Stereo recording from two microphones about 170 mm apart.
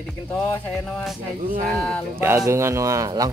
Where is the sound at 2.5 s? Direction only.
15° right (ahead or behind).